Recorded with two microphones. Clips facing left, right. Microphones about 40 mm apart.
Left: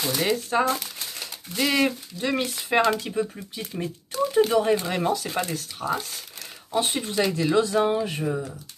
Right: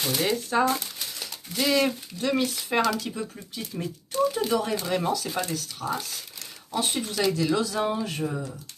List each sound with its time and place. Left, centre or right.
0.2 s speech: centre